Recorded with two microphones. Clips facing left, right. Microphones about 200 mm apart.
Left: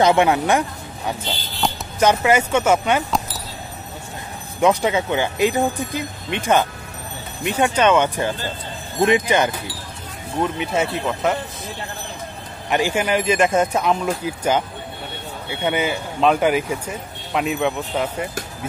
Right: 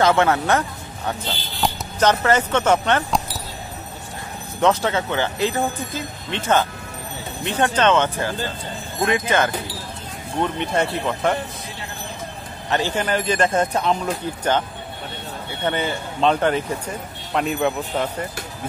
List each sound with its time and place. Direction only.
0.0 s speech: 15° left (ahead or behind)
4.6 s speech: 10° left (ahead or behind)
10.4 s speech: 5° left (ahead or behind)
12.6 s speech: 15° left (ahead or behind)
15.6 s speech: 10° left (ahead or behind)